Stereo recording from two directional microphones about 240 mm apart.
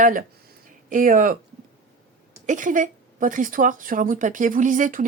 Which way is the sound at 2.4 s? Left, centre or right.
Right.